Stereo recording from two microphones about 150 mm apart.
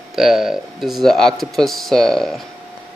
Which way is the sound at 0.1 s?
5° right (ahead or behind).